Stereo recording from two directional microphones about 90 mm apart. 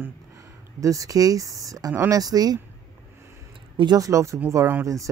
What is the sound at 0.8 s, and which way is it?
Speech, 40° right (ahead or behind).